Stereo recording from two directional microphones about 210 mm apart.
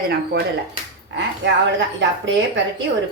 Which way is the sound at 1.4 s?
60° right (ahead or behind).